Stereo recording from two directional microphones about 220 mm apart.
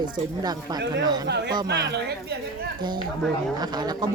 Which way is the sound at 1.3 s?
50° right (ahead or behind).